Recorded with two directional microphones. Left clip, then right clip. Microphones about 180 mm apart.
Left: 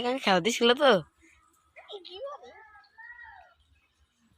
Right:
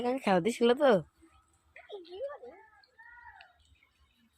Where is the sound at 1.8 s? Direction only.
65° right (ahead or behind).